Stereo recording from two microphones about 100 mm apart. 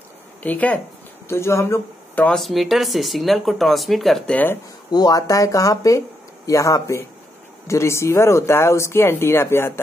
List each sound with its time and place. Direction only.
0.4 s speech: 15° left (ahead or behind)
1.3 s speech: 30° left (ahead or behind)
2.3 s speech: centre (ahead or behind)
4.3 s speech: 15° left (ahead or behind)
4.9 s speech: 40° left (ahead or behind); by 9.8 s 25° left (ahead or behind)